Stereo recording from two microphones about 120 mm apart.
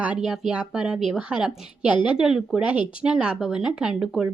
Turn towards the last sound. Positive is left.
turn(degrees=-5)  # may be behind; listen again after turning